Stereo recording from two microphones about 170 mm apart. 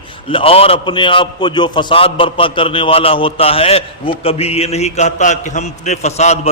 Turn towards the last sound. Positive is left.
turn(degrees=40)  # may be behind; listen again after turning